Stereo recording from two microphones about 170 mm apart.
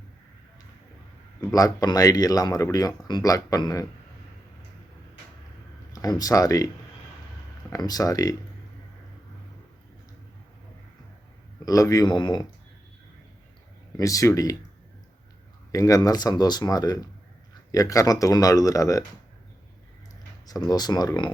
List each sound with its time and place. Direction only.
1.4 s speech: 20° left (ahead or behind)
5.9 s speech: 20° left (ahead or behind)
7.7 s speech: 20° left (ahead or behind)
11.6 s speech: 20° left (ahead or behind)
13.9 s speech: 20° left (ahead or behind)
15.7 s speech: 20° left (ahead or behind)
20.5 s speech: 25° left (ahead or behind)